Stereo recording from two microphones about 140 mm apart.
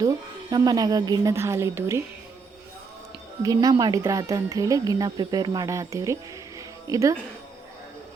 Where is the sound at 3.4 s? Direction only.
25° right (ahead or behind).